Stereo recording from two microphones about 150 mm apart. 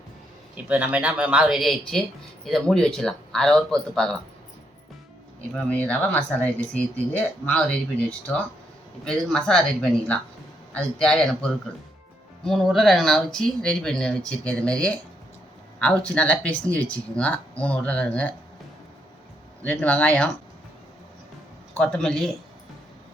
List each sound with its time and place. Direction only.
0.5 s speech: 10° right (ahead or behind)
5.5 s speech: 10° left (ahead or behind)
19.6 s speech: 10° left (ahead or behind)
21.8 s speech: 5° left (ahead or behind)